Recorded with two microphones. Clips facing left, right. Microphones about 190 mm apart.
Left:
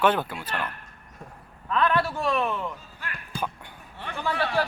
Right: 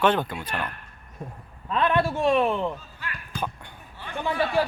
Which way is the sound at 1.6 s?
25° right (ahead or behind).